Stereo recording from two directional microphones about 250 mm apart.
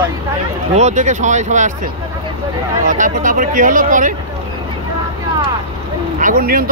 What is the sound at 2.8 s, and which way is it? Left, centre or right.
Speech, right.